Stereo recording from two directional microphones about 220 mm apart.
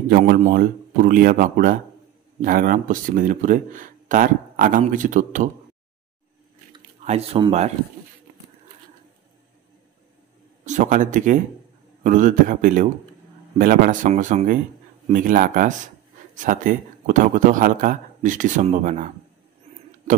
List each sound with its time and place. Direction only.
0.1 s speech: 35° right (ahead or behind)
6.7 s speech: 25° right (ahead or behind)
10.6 s a man's voice: 35° right (ahead or behind)